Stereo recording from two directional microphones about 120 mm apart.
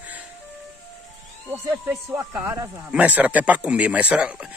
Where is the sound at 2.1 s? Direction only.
25° right (ahead or behind).